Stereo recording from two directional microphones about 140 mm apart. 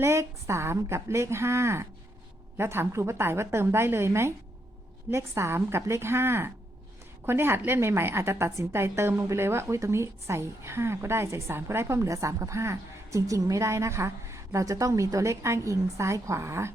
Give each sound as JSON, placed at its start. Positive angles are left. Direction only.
{"t": 0.0, "sound": "a woman's voice", "side_deg": -20}